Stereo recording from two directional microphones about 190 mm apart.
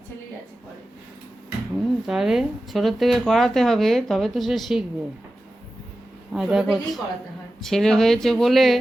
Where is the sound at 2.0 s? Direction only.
Centre (ahead or behind).